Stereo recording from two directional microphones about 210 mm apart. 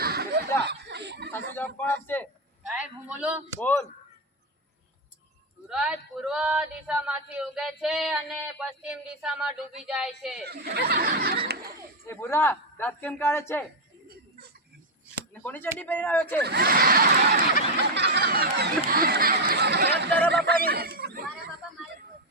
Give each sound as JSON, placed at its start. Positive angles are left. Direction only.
{"t": 0.0, "sound": "snicker", "side_deg": -50}
{"t": 0.6, "sound": "chuckle", "side_deg": -50}
{"t": 1.3, "sound": "a man's voice", "side_deg": 10}
{"t": 3.1, "sound": "speech", "side_deg": -5}
{"t": 3.6, "sound": "a man's voice", "side_deg": 10}
{"t": 5.6, "sound": "speech", "side_deg": -5}
{"t": 10.4, "sound": "speech", "side_deg": -50}
{"t": 12.0, "sound": "a man's voice", "side_deg": 10}
{"t": 15.3, "sound": "a man's voice", "side_deg": 10}
{"t": 16.4, "sound": "speech", "side_deg": -50}
{"t": 17.9, "sound": "a sound", "side_deg": -55}
{"t": 18.9, "sound": "chatter", "side_deg": -45}
{"t": 20.3, "sound": "speech", "side_deg": -45}